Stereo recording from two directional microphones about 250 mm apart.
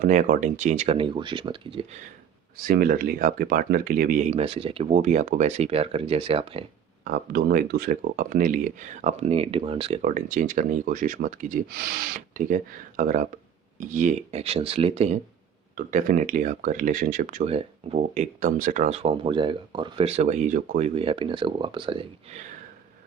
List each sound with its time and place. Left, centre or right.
0.0 s speech: right
2.6 s speech: right